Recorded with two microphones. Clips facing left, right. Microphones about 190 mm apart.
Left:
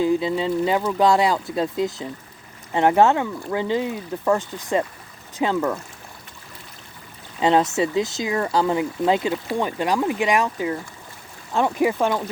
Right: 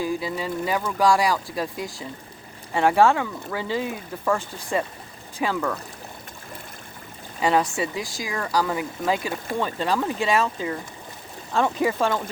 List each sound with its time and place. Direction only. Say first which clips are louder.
0.0 s speech: left 6 dB; 20° left (ahead or behind)
7.3 s speech: left 3 dB; 20° left (ahead or behind)